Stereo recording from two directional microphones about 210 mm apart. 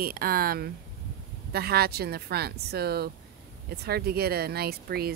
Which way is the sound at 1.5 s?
50° right (ahead or behind).